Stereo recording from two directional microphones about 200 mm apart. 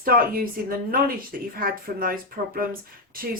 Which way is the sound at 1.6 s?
45° right (ahead or behind).